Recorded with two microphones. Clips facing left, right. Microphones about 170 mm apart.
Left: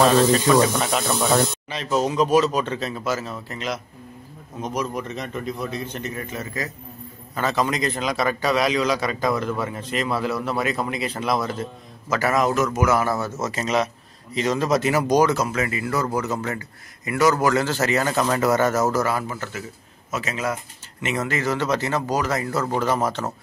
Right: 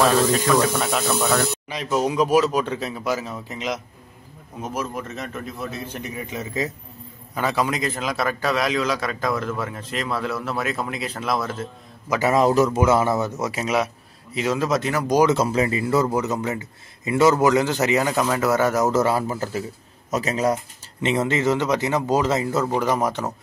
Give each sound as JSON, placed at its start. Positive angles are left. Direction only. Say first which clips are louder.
{"t": 0.6, "sound": "a man's voice", "louder": "left 1 dB", "side_deg": 0}
{"t": 1.7, "sound": "a man's voice", "louder": "even", "side_deg": -10}
{"t": 4.6, "sound": "a man's voice", "louder": "left 2 dB", "side_deg": -5}
{"t": 7.3, "sound": "a man's voice", "louder": "even", "side_deg": -10}
{"t": 12.1, "sound": "a man's voice", "louder": "right 3 dB", "side_deg": -20}
{"t": 15.2, "sound": "speech", "louder": "right 3 dB", "side_deg": -30}
{"t": 21.0, "sound": "speech", "louder": "right 4 dB", "side_deg": -25}